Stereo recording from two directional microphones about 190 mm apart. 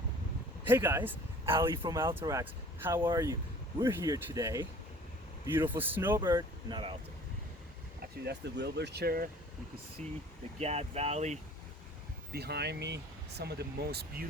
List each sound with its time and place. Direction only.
0.7 s speech: 10° right (ahead or behind)
6.2 s speech: 25° right (ahead or behind)
8.2 s speech: 60° right (ahead or behind)
10.6 s speech: 35° right (ahead or behind)
12.3 s speech: 60° right (ahead or behind)